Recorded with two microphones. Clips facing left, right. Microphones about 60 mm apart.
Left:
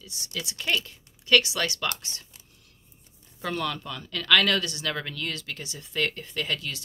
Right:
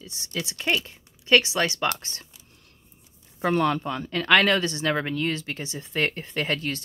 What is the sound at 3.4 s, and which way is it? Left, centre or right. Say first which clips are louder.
Speech: right 8 dB; right.